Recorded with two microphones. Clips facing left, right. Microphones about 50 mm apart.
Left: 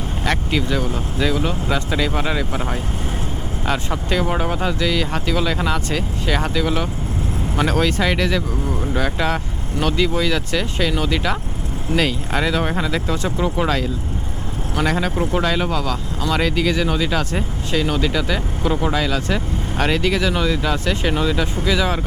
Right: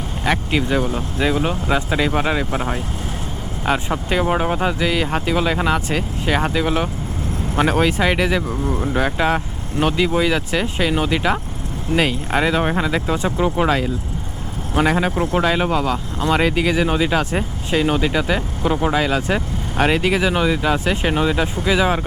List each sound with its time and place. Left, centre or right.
0.3 s speech: centre